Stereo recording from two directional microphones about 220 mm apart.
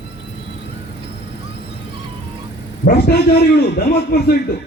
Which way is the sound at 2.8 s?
45° left (ahead or behind).